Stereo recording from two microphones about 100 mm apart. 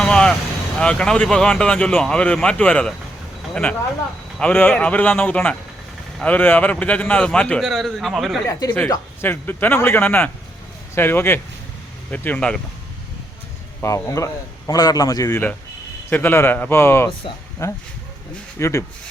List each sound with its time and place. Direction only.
0.0 s vehicle: 10° left (ahead or behind)
0.8 s speech: 10° left (ahead or behind)
7.6 s a man's voice: centre (ahead or behind)
9.2 s speech: 20° left (ahead or behind)
13.8 s a man's voice: 30° left (ahead or behind)
16.0 s speech: 20° left (ahead or behind)